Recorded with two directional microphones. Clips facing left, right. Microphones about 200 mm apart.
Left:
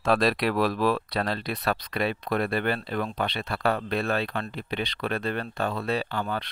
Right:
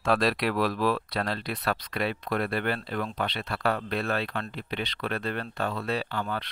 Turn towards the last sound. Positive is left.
turn(degrees=15)  # may be behind; listen again after turning